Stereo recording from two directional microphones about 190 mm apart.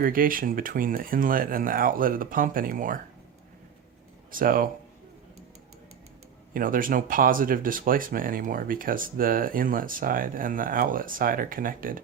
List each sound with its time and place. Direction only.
0.0 s speech: 50° right (ahead or behind)
4.3 s speech: 45° right (ahead or behind)
6.5 s speech: 45° right (ahead or behind)